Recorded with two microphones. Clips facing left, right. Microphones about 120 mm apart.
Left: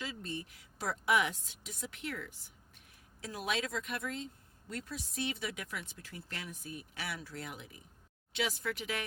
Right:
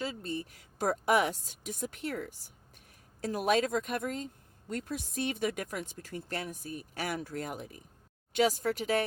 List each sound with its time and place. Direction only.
0.0 s a woman's voice: 35° right (ahead or behind)